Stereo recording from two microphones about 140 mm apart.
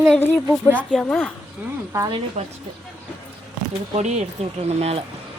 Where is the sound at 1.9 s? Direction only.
20° right (ahead or behind).